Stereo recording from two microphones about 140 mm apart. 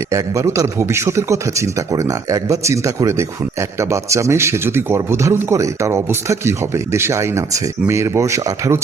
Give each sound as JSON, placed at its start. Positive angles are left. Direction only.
{"t": 0.1, "sound": "a man's voice", "side_deg": -20}